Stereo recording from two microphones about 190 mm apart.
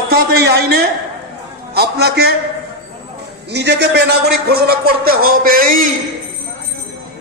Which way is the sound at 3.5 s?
65° right (ahead or behind).